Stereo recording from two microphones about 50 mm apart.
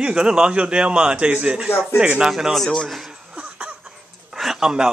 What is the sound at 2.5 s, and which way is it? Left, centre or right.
Speech, centre.